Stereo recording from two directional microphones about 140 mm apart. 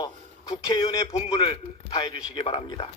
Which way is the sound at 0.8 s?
45° left (ahead or behind).